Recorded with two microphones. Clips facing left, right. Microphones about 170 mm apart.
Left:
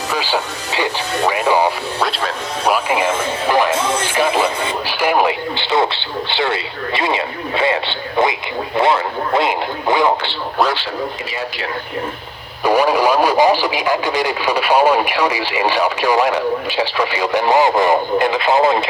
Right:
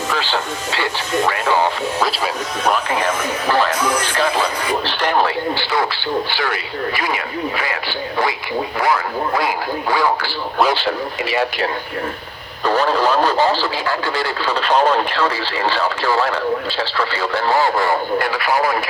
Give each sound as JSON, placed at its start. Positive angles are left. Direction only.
{"t": 0.1, "sound": "speech", "side_deg": 15}
{"t": 1.3, "sound": "radio", "side_deg": 15}
{"t": 2.0, "sound": "music", "side_deg": 0}
{"t": 2.6, "sound": "music", "side_deg": 10}
{"t": 3.7, "sound": "music", "side_deg": 25}
{"t": 4.1, "sound": "music", "side_deg": 10}
{"t": 4.9, "sound": "speech", "side_deg": 10}
{"t": 10.8, "sound": "speech", "side_deg": -75}
{"t": 12.6, "sound": "speech", "side_deg": 10}